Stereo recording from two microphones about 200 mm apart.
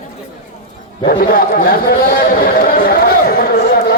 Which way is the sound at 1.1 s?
50° left (ahead or behind).